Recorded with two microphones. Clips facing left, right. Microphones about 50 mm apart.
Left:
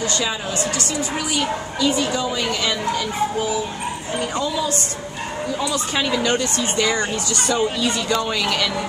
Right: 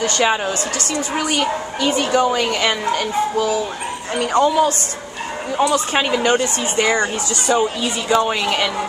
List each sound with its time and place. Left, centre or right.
0.0 s a woman's voice: right
7.0 s speech: centre